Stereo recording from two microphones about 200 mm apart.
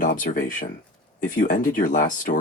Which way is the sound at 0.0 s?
40° left (ahead or behind).